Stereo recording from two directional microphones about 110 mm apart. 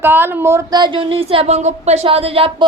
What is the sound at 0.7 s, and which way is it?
Speech, 45° right (ahead or behind).